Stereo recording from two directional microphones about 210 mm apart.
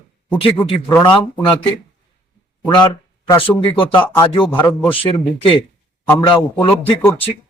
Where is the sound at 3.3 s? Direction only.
25° left (ahead or behind).